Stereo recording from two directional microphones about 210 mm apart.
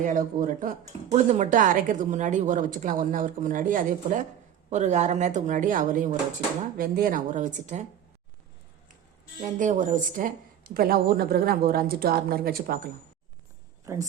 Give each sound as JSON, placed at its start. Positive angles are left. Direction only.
{"t": 0.0, "sound": "speech", "side_deg": -40}
{"t": 9.4, "sound": "a woman's voice", "side_deg": -35}
{"t": 13.9, "sound": "speech", "side_deg": -15}